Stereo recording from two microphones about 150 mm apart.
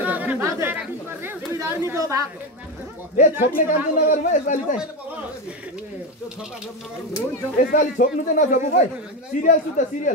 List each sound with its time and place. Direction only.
0.0 s chatter: 10° right (ahead or behind)
1.6 s speech: 20° right (ahead or behind)
3.2 s a man's voice: 70° left (ahead or behind)
7.5 s a man's voice: 60° left (ahead or behind)